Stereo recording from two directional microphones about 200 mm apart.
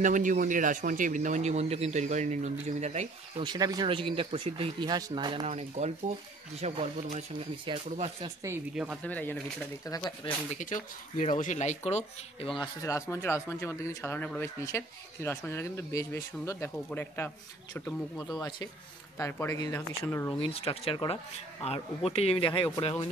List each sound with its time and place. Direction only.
0.0 s speech: 40° right (ahead or behind)
3.4 s speech: 20° right (ahead or behind)
8.7 s speech: 5° right (ahead or behind)
9.0 s speech: 10° left (ahead or behind)
10.6 s speech: 40° left (ahead or behind)
13.1 s speech: 15° left (ahead or behind)
18.3 s speech: 20° left (ahead or behind)
20.3 s speech: 30° left (ahead or behind)